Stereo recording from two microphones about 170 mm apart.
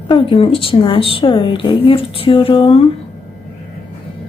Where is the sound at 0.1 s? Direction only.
30° left (ahead or behind).